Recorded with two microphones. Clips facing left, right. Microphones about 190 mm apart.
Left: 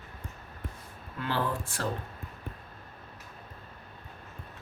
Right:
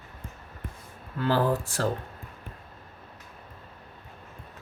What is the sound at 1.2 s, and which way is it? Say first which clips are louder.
Speech: right 7 dB; 40° right (ahead or behind).